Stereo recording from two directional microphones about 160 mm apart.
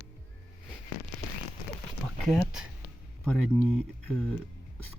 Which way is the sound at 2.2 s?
5° left (ahead or behind).